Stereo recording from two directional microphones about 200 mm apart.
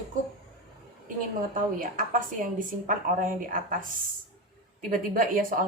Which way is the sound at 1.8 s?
40° right (ahead or behind).